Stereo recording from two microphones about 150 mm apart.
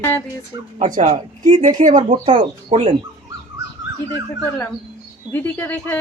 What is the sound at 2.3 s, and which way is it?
Speech, 35° right (ahead or behind).